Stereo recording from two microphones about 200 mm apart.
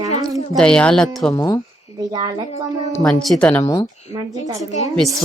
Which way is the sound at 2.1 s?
25° right (ahead or behind).